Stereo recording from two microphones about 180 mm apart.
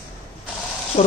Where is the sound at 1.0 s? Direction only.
35° left (ahead or behind).